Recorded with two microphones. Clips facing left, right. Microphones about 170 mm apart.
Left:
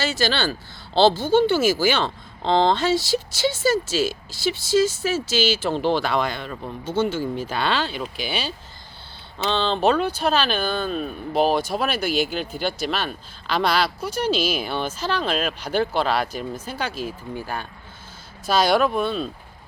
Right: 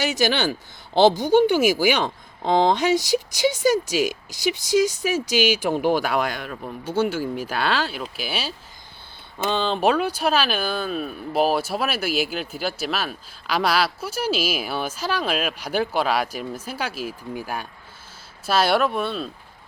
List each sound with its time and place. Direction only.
0.0 s speech: 15° right (ahead or behind); by 19.3 s centre (ahead or behind)